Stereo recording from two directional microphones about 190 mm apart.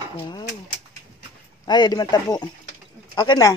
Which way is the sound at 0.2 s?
25° left (ahead or behind).